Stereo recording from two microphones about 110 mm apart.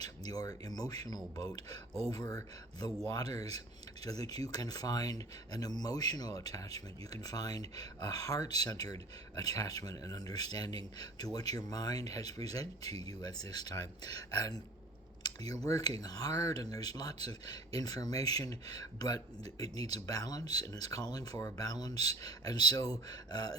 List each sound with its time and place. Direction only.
0.0 s speech: 35° left (ahead or behind)
15.6 s speech: 35° left (ahead or behind)